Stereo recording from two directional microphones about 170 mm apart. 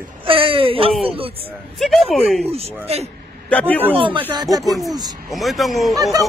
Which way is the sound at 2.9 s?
35° right (ahead or behind).